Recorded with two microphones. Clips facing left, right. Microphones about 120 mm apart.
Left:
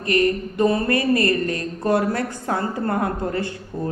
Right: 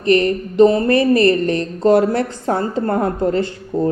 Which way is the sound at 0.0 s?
25° right (ahead or behind).